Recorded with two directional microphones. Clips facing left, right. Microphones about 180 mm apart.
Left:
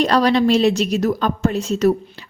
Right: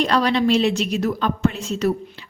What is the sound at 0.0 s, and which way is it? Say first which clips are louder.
Speech: left 3 dB; 40° left (ahead or behind).